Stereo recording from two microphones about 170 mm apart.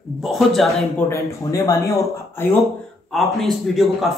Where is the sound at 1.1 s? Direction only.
20° left (ahead or behind).